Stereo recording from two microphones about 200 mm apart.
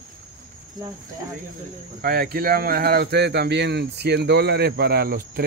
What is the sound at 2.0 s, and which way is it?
Speech, 50° right (ahead or behind).